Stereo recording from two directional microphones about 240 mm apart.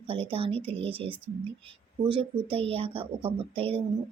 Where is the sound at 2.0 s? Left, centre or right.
Right.